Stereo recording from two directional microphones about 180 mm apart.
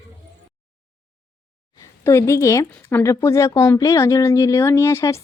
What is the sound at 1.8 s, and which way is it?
A woman's voice, 15° left (ahead or behind).